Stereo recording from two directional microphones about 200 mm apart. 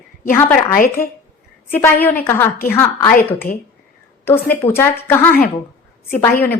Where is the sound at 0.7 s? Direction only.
45° left (ahead or behind).